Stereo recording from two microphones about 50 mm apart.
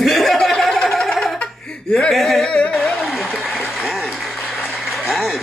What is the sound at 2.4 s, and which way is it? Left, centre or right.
Music, left.